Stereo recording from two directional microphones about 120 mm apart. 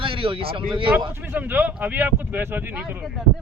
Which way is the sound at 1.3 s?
15° right (ahead or behind).